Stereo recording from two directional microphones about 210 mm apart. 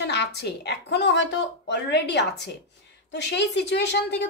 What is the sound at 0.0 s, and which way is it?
A woman's voice, 55° left (ahead or behind).